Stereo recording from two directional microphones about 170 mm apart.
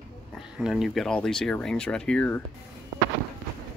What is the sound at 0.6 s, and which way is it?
Speech, centre (ahead or behind).